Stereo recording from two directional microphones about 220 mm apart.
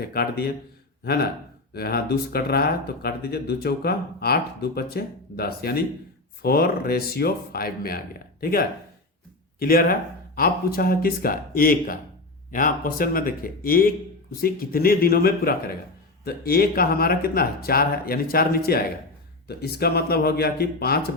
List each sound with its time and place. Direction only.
0.0 s speech: 45° left (ahead or behind)
1.7 s speech: 45° left (ahead or behind)